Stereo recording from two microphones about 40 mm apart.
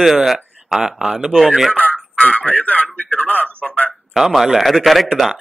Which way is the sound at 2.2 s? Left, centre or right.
Left.